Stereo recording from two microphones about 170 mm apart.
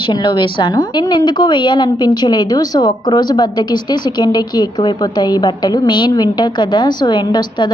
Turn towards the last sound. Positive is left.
turn(degrees=25)  # may be behind; listen again after turning